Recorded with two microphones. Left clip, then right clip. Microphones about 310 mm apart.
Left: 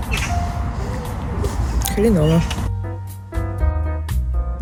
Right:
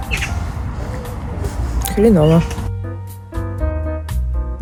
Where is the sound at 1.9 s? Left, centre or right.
Centre.